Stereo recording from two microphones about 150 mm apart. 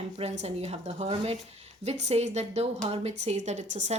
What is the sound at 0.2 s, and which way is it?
A woman's voice, 45° right (ahead or behind).